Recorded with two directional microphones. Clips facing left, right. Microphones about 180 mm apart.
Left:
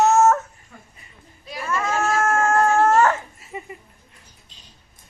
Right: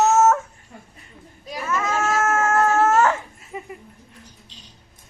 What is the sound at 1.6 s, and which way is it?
Cat, 5° right (ahead or behind).